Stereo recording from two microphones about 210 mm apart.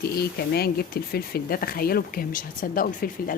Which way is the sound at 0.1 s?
50° left (ahead or behind).